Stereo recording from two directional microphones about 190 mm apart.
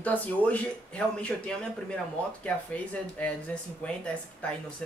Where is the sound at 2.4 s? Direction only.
5° left (ahead or behind).